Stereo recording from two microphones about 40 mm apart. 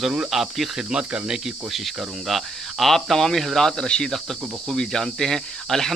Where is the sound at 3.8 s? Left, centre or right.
Left.